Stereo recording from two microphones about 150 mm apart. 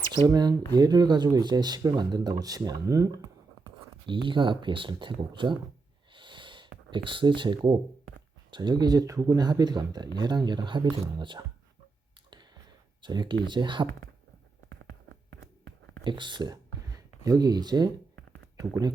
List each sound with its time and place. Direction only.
0.1 s speech: 30° right (ahead or behind)
4.0 s speech: 35° right (ahead or behind)
6.1 s gasp: 30° right (ahead or behind)
8.4 s speech: 30° right (ahead or behind)
13.0 s speech: 30° right (ahead or behind)
16.0 s speech: 30° right (ahead or behind)